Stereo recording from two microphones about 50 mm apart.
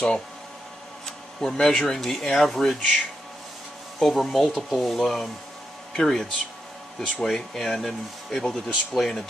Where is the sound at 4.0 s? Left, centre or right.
Centre.